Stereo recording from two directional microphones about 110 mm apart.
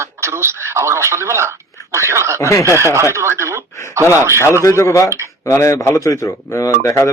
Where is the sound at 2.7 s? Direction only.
25° right (ahead or behind).